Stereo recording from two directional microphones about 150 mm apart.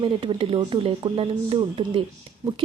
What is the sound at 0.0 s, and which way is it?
Speech, 35° right (ahead or behind).